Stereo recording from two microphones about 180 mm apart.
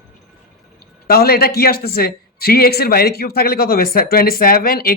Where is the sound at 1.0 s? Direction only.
60° left (ahead or behind).